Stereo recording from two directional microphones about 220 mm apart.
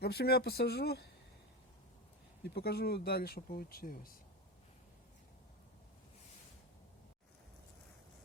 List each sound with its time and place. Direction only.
0.0 s speech: 45° left (ahead or behind)
2.4 s speech: 45° left (ahead or behind)